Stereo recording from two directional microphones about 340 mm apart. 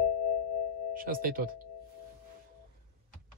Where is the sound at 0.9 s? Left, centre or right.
Right.